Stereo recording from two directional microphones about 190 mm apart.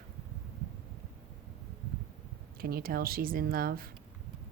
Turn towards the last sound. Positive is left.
turn(degrees=-50)  # may be behind; listen again after turning